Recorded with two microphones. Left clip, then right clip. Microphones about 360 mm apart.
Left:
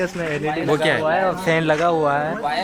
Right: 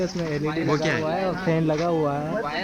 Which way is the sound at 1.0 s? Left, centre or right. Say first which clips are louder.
Left 6 dB; left.